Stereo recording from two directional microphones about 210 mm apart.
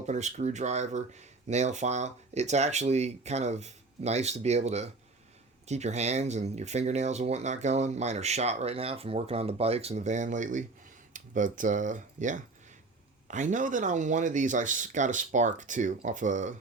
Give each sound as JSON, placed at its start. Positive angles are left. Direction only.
{"t": 0.0, "sound": "speech", "side_deg": -35}